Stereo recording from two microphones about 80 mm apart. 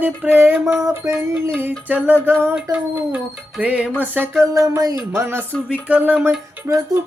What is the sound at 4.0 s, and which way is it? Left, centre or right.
Music, right.